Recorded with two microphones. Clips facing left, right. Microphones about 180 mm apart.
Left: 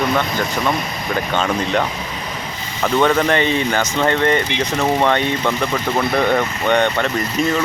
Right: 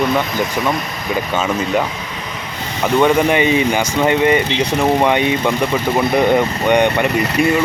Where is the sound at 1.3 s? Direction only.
5° right (ahead or behind).